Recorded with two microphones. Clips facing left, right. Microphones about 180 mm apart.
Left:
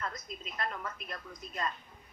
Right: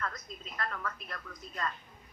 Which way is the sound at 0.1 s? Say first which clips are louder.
Left 2 dB; 15° left (ahead or behind).